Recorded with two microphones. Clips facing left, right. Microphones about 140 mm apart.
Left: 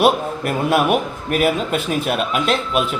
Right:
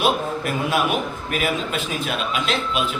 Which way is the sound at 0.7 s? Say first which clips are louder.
Left 6 dB; 55° left (ahead or behind).